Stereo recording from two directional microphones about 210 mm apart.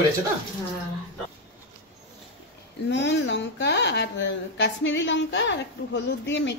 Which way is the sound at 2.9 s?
55° left (ahead or behind).